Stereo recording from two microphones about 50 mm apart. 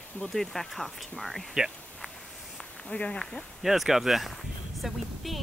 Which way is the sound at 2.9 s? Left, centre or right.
Left.